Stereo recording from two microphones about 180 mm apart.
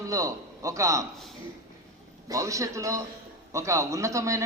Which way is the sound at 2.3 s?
15° right (ahead or behind).